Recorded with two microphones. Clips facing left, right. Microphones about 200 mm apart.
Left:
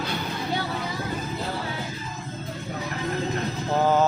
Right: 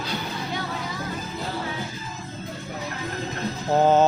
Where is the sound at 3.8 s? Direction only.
25° right (ahead or behind).